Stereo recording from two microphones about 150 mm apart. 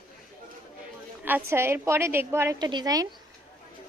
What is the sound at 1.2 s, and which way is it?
A woman's voice, 15° right (ahead or behind).